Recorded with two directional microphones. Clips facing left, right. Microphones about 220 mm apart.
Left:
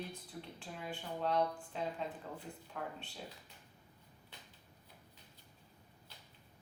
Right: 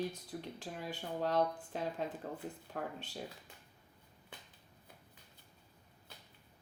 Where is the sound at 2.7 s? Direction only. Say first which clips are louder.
Right 2 dB; 50° right (ahead or behind).